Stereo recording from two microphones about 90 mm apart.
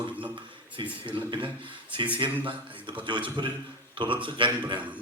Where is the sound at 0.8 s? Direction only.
60° right (ahead or behind).